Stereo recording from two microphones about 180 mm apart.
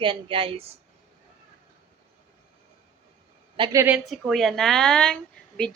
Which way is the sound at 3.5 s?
25° right (ahead or behind).